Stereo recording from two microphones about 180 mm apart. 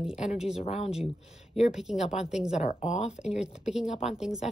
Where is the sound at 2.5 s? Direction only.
40° left (ahead or behind).